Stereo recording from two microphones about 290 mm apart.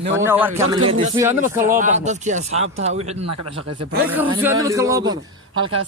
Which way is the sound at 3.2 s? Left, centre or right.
Right.